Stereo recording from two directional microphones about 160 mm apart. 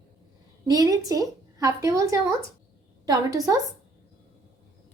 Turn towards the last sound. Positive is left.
turn(degrees=-20)  # may be behind; listen again after turning